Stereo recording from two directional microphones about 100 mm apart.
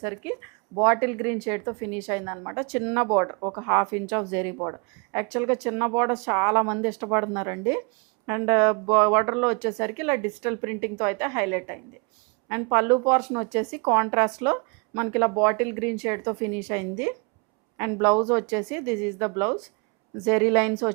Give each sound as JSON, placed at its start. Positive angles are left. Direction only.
{"t": 0.0, "sound": "a woman's voice", "side_deg": -15}